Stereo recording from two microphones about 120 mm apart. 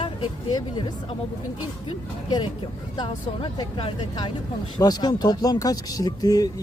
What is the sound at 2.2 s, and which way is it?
Speech, 40° left (ahead or behind).